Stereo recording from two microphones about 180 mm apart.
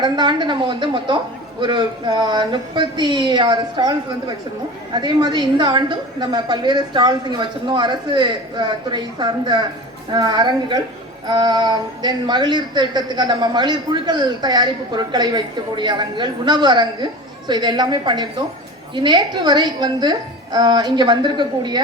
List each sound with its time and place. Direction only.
0.0 s a woman's voice: 25° right (ahead or behind)